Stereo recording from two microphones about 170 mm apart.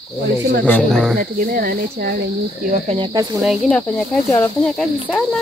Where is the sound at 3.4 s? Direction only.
Centre (ahead or behind).